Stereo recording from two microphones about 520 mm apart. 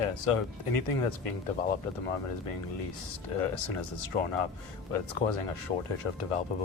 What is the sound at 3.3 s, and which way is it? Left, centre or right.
Speech, left.